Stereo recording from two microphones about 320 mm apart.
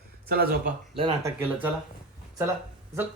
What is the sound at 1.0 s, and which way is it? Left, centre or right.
Speech, centre.